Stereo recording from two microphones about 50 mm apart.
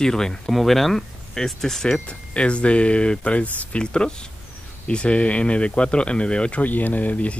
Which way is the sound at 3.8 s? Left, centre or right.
Centre.